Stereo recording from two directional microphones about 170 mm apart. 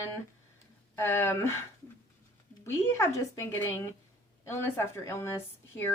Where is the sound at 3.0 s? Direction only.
15° left (ahead or behind).